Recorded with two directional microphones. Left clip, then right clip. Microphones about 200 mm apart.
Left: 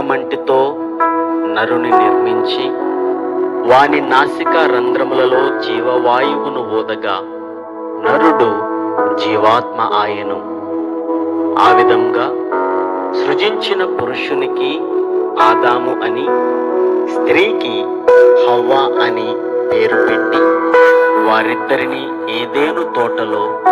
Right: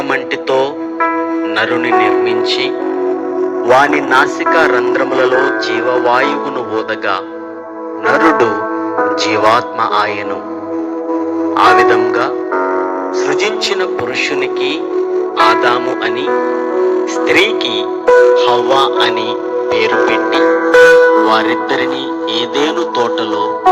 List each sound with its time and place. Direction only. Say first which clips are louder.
0.1 s music: left 1 dB; 35° left (ahead or behind)
1.5 s speech: even; 35° left (ahead or behind)
3.7 s speech: even; 20° left (ahead or behind)
8.0 s speech: right 1 dB; 10° left (ahead or behind)
11.5 s speech: right 1 dB; 10° left (ahead or behind)
13.1 s music: even; 20° left (ahead or behind)
14.3 s speech: right 1 dB; 35° left (ahead or behind)